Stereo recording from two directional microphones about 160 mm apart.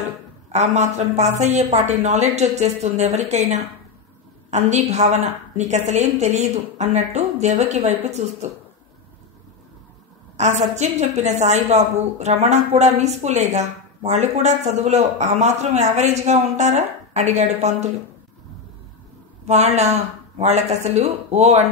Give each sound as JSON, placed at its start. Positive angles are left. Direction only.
{"t": 0.5, "sound": "a woman's voice", "side_deg": -45}
{"t": 10.3, "sound": "a woman's voice", "side_deg": -45}
{"t": 19.4, "sound": "a woman's voice", "side_deg": -45}